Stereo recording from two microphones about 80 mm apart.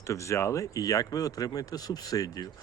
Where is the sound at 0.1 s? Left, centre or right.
Left.